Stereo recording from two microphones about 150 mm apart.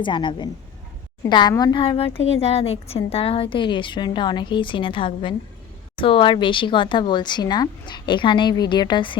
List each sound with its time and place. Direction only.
0.0 s a woman's voice: 30° left (ahead or behind)